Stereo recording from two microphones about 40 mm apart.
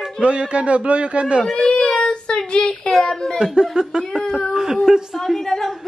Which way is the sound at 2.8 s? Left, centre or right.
Centre.